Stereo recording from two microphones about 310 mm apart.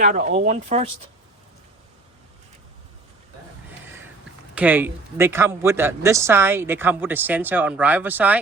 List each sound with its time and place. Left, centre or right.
0.0 s speech: right
4.5 s a man's voice: centre